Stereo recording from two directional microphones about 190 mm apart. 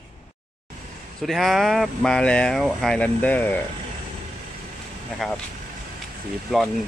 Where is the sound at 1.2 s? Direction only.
Centre (ahead or behind).